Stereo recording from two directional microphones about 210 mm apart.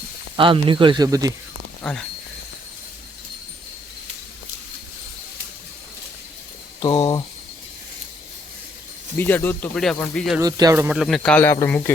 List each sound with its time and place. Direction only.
0.3 s speech: 25° right (ahead or behind)
1.8 s speech: 5° left (ahead or behind)
6.8 s speech: 20° left (ahead or behind)
9.1 s speech: 10° left (ahead or behind)
10.4 s speech: 15° right (ahead or behind)
10.8 s speech: centre (ahead or behind)